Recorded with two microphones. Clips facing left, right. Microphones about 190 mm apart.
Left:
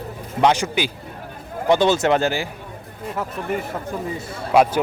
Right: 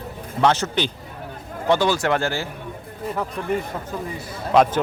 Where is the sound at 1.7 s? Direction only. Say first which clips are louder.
Left 3 dB; 20° left (ahead or behind).